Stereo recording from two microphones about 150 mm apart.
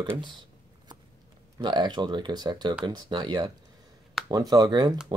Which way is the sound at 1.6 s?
30° right (ahead or behind).